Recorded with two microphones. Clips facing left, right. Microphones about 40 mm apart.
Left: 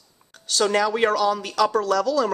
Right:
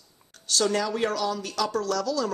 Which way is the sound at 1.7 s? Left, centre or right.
Left.